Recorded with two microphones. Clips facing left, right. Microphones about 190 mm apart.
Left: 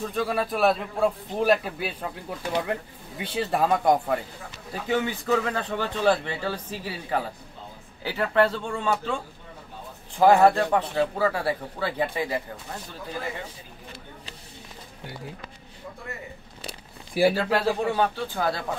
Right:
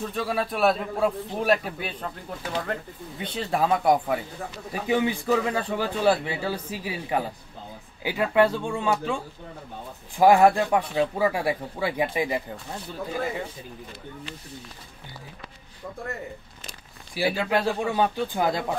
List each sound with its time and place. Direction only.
0.1 s a man's voice: centre (ahead or behind)
4.8 s speech: 15° right (ahead or behind)
17.1 s speech: 55° left (ahead or behind)
17.5 s speech: 10° right (ahead or behind)